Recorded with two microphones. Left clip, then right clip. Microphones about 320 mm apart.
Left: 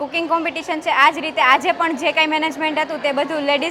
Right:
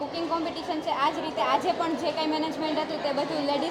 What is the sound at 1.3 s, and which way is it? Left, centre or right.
Speech, left.